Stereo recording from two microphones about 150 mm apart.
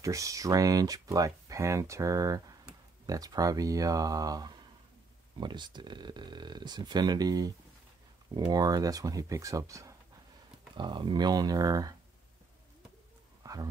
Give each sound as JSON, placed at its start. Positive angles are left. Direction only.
{"t": 0.0, "sound": "speech", "side_deg": -20}
{"t": 10.8, "sound": "speech", "side_deg": -30}
{"t": 13.4, "sound": "a sound", "side_deg": -25}